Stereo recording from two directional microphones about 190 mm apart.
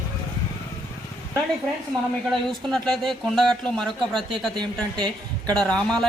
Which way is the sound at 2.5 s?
Centre (ahead or behind).